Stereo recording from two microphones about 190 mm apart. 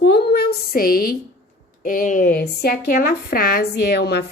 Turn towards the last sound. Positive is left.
turn(degrees=60)  # may be behind; listen again after turning